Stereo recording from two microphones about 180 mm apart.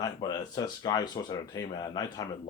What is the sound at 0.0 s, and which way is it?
Speech, 20° left (ahead or behind).